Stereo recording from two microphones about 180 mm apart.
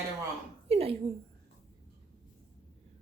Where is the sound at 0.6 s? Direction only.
35° right (ahead or behind).